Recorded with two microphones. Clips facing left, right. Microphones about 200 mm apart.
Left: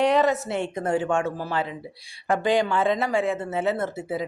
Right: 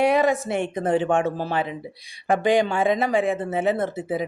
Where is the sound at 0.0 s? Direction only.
10° right (ahead or behind).